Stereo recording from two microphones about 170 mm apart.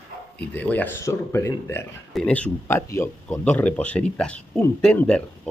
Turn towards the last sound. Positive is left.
turn(degrees=5)  # may be behind; listen again after turning